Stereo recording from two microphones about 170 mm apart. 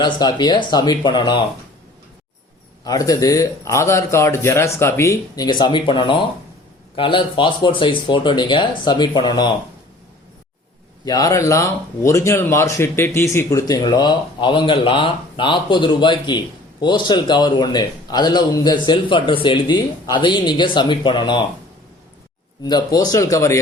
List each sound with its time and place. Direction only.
0.0 s speech: 25° left (ahead or behind)
2.8 s speech: 20° left (ahead or behind)
11.0 s speech: 20° left (ahead or behind)
22.6 s speech: 25° left (ahead or behind)